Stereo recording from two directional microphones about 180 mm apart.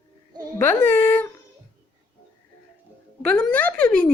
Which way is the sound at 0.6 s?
10° left (ahead or behind).